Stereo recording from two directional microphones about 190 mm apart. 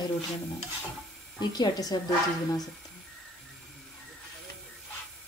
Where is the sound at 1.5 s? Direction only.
20° left (ahead or behind).